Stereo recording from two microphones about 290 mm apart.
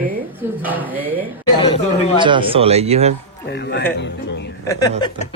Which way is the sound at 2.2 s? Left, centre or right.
Centre.